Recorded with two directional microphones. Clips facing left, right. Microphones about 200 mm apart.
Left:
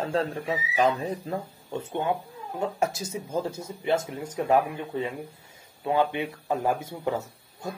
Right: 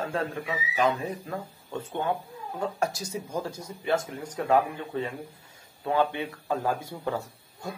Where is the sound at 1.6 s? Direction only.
20° left (ahead or behind).